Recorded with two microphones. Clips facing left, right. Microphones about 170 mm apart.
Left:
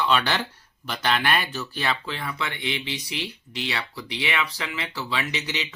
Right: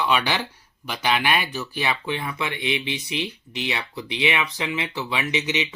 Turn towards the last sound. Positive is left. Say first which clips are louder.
# right 5 dB
turn(degrees=-20)  # may be behind; listen again after turning